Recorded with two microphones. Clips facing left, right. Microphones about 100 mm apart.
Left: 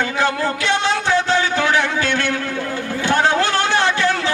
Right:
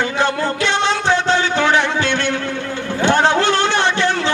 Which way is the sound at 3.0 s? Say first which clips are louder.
Right 3 dB; 25° right (ahead or behind).